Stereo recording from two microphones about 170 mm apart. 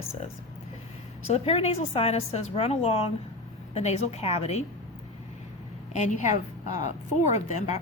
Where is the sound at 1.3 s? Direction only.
35° left (ahead or behind).